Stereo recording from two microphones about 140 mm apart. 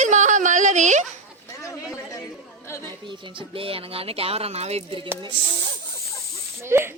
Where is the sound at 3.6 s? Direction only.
40° right (ahead or behind).